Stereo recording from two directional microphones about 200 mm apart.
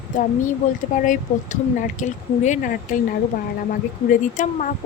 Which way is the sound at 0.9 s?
40° left (ahead or behind).